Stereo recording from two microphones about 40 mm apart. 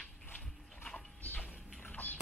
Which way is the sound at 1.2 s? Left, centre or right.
Left.